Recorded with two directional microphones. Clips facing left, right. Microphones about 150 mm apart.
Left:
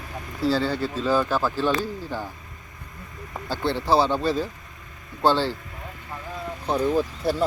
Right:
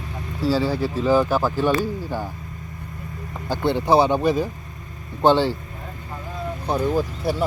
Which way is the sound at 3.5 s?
15° right (ahead or behind).